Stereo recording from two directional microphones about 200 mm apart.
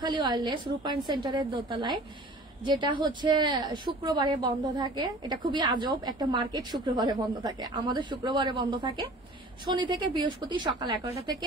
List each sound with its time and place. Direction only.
0.0 s a woman's voice: 20° right (ahead or behind)